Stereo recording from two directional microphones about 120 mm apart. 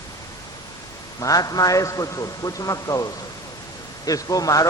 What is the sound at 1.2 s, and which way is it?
A man's voice, 30° left (ahead or behind).